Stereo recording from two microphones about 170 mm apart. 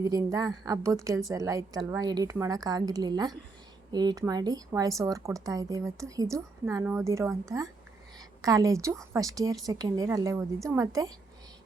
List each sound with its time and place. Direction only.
0.0 s speech: 20° right (ahead or behind)